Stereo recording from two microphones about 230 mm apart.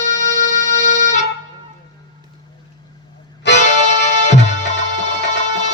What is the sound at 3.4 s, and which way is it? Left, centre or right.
Music, left.